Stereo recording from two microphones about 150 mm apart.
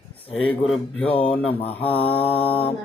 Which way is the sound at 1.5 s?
40° left (ahead or behind).